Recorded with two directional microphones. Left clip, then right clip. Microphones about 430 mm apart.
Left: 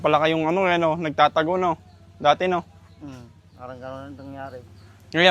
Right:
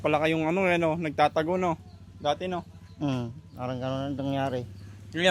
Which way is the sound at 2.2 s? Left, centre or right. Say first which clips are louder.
Left 9 dB; left.